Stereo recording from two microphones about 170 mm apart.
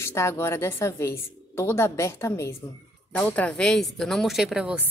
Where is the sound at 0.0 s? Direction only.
15° left (ahead or behind).